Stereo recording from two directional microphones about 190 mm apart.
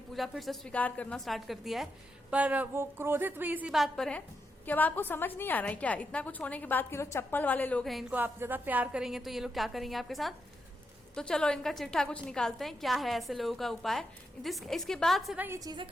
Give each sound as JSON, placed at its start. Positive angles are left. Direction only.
{"t": 0.1, "sound": "a woman's voice", "side_deg": 0}
{"t": 8.2, "sound": "a woman's voice", "side_deg": -10}
{"t": 15.4, "sound": "a woman's voice", "side_deg": -20}